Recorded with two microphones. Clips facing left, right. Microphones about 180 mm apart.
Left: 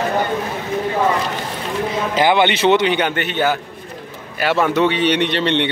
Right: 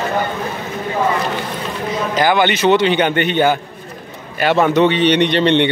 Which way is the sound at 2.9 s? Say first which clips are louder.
Right 4 dB; 5° left (ahead or behind).